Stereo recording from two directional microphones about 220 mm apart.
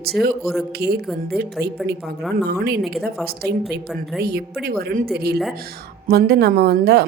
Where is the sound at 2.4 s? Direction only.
45° right (ahead or behind).